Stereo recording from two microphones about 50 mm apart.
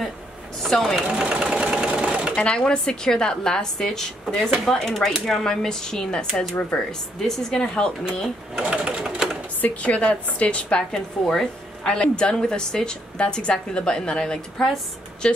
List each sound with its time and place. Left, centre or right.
0.6 s speech: centre
1.0 s sewing machine: centre
2.3 s a woman's voice: centre
8.6 s sewing machine: centre
9.6 s a woman's voice: left
10.9 s a woman's voice: centre